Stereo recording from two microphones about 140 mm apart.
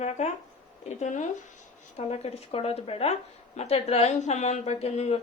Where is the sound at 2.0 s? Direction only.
50° left (ahead or behind).